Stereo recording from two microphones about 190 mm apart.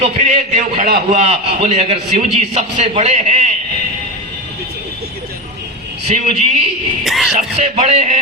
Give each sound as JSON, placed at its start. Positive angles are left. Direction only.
{"t": 0.0, "sound": "a man's voice", "side_deg": -35}
{"t": 6.1, "sound": "a man's voice", "side_deg": -40}
{"t": 7.0, "sound": "speech", "side_deg": 0}
{"t": 7.3, "sound": "a man's voice", "side_deg": -35}